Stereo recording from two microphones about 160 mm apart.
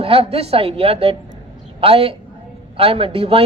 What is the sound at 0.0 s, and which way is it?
A man's voice, 35° right (ahead or behind).